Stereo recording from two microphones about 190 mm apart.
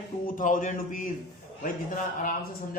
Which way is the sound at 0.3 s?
45° left (ahead or behind).